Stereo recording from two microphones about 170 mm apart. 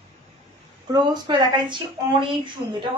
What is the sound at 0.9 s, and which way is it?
A woman's voice, 25° right (ahead or behind).